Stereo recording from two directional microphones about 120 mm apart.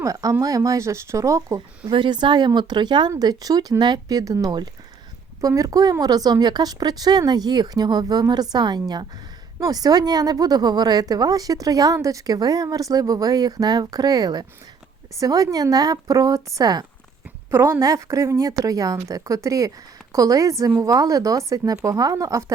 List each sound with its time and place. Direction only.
0.0 s a woman's voice: 30° right (ahead or behind)
1.9 s a woman's voice: 40° right (ahead or behind)